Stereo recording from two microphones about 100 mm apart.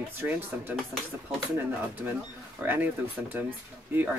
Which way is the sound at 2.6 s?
20° right (ahead or behind).